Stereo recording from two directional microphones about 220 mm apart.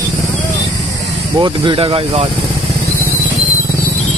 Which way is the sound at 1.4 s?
20° right (ahead or behind).